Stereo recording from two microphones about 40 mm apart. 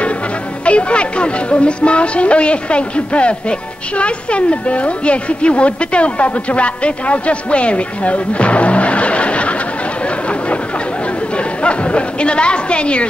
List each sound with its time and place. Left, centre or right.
0.7 s speech: left
11.3 s a woman's voice: left